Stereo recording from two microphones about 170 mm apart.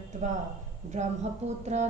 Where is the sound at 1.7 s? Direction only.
40° right (ahead or behind).